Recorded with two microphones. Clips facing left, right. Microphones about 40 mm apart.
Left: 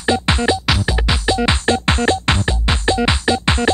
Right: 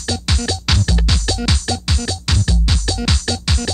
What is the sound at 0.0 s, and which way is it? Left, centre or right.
Music, left.